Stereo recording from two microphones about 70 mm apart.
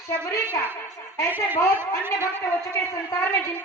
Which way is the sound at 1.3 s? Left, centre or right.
Right.